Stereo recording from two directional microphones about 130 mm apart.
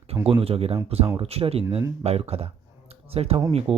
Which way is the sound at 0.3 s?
50° right (ahead or behind).